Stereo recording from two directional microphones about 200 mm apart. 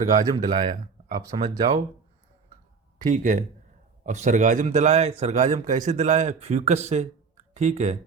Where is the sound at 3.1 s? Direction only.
40° right (ahead or behind).